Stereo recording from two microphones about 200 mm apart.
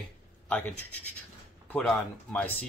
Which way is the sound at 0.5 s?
10° left (ahead or behind).